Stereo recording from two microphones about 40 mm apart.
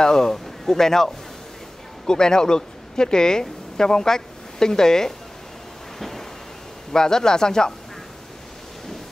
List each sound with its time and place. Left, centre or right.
0.0 s a woman's voice: centre
5.9 s a sound: centre
6.9 s speech: centre